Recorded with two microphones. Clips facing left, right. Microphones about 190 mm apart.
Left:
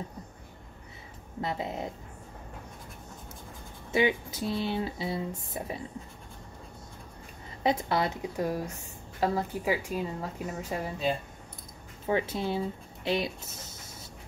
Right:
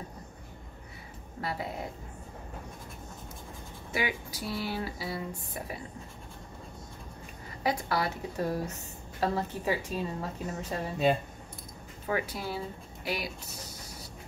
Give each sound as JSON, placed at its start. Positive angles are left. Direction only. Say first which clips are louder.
{"t": 1.4, "sound": "speech", "louder": "left 2 dB", "side_deg": 20}
{"t": 3.9, "sound": "speech", "louder": "left 7 dB", "side_deg": 25}
{"t": 7.6, "sound": "a woman's voice", "louder": "left 3 dB", "side_deg": 20}
{"t": 12.1, "sound": "speech", "louder": "left 4 dB", "side_deg": 25}